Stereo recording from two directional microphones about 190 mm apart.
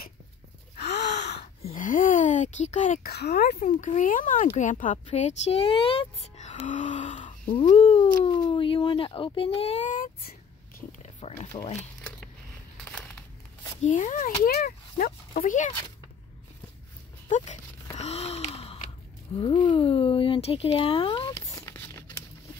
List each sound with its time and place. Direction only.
0.7 s gasp: 60° left (ahead or behind)
1.4 s a sound: 35° left (ahead or behind)
3.1 s speech: 60° left (ahead or behind)
3.5 s speech: 40° left (ahead or behind)
10.9 s a sound: 35° left (ahead or behind)
12.8 s a sound: 5° left (ahead or behind)
13.8 s speech: 40° left (ahead or behind)
14.4 s speech: 50° left (ahead or behind)
15.0 s speech: 40° left (ahead or behind)
17.9 s gasp: 35° left (ahead or behind)
19.3 s speech: 25° left (ahead or behind)
21.5 s a sound: 15° left (ahead or behind)